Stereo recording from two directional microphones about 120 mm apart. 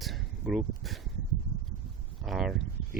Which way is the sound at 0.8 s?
Centre (ahead or behind).